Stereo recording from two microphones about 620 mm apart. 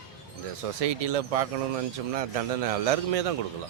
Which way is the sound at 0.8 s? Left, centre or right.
Right.